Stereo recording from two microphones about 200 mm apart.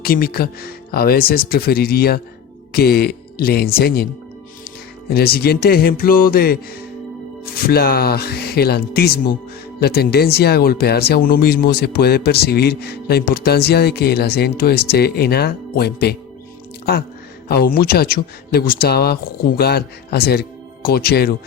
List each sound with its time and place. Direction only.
0.0 s speech: 50° left (ahead or behind)
5.0 s speech: 50° left (ahead or behind)
17.5 s speech: 50° left (ahead or behind)